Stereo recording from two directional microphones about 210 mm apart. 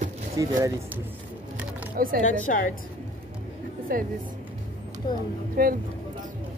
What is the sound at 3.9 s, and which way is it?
Speech, 40° right (ahead or behind).